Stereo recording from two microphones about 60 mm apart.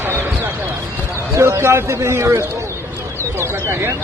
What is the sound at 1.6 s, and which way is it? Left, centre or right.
Speech, right.